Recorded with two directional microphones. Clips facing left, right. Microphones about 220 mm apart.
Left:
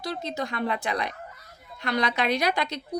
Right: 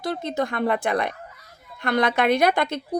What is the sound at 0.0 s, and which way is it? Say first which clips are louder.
A woman's voice: right 5 dB; 55° right (ahead or behind).